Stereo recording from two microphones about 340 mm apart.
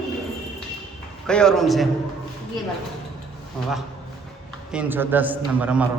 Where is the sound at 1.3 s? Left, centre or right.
Centre.